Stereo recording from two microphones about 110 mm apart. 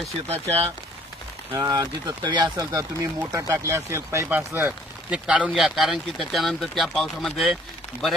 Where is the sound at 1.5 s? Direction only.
35° right (ahead or behind).